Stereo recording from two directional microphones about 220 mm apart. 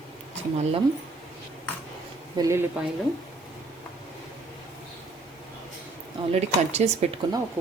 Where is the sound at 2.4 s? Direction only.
15° right (ahead or behind).